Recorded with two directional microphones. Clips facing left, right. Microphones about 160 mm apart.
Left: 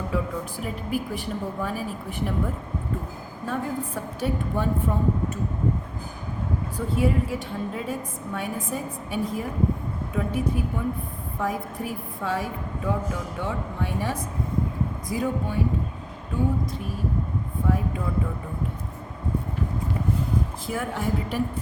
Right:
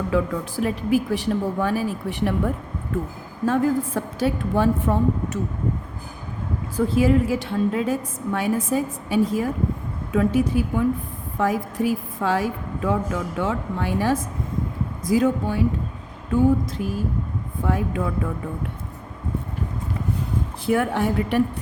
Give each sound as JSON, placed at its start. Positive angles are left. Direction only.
{"t": 0.1, "sound": "a woman's voice", "side_deg": -90}
{"t": 3.4, "sound": "a woman's voice", "side_deg": -90}
{"t": 6.7, "sound": "a woman's voice", "side_deg": -90}
{"t": 16.6, "sound": "a woman's voice", "side_deg": -90}
{"t": 20.7, "sound": "a woman's voice", "side_deg": -70}